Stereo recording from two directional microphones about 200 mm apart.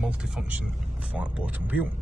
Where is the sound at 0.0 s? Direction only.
5° right (ahead or behind).